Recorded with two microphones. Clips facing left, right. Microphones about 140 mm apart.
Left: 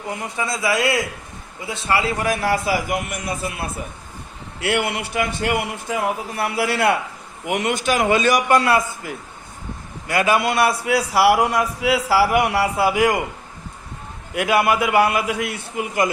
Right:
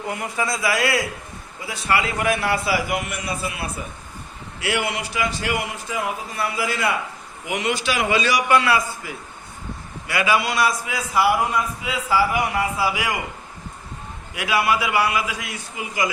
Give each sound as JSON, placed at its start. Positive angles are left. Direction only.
{"t": 0.2, "sound": "a man's voice", "side_deg": 25}
{"t": 7.4, "sound": "a man's voice", "side_deg": 50}
{"t": 14.3, "sound": "a man's voice", "side_deg": 50}